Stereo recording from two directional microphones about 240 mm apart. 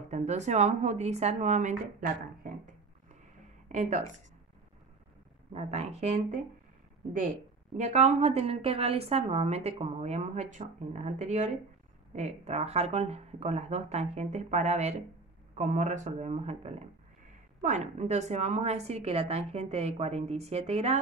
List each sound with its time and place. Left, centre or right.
0.1 s speech: right
5.5 s a woman's voice: right
7.7 s a woman's voice: right